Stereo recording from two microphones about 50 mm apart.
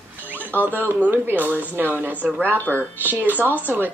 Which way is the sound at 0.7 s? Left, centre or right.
Right.